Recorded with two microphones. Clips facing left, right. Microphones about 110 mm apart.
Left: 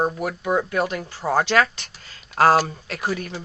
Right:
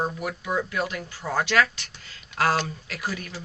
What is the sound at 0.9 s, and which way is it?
Speech, 30° left (ahead or behind).